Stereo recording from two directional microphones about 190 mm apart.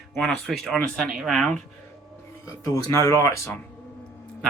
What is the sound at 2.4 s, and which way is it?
Speech, 15° left (ahead or behind).